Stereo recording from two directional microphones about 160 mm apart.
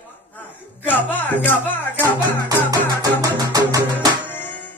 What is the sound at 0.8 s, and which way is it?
Music, 10° left (ahead or behind).